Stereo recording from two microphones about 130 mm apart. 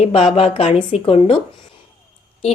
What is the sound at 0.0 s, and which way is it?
A woman's voice, 50° left (ahead or behind).